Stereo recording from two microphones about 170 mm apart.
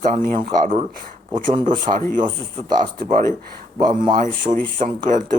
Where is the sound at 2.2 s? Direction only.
25° right (ahead or behind).